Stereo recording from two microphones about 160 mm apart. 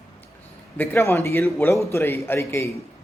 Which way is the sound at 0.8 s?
15° left (ahead or behind).